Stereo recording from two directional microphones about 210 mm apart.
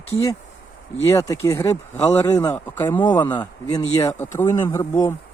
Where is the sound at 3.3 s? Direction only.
20° left (ahead or behind).